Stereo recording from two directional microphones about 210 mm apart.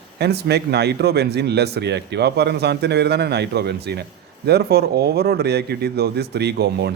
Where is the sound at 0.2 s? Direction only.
50° right (ahead or behind).